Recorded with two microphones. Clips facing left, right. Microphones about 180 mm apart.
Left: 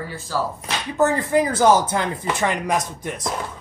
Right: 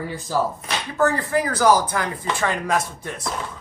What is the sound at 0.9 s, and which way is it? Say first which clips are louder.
Speech: left 2 dB; 20° left (ahead or behind).